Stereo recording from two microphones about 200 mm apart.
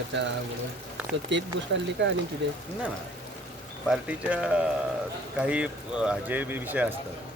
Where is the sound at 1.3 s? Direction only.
65° right (ahead or behind).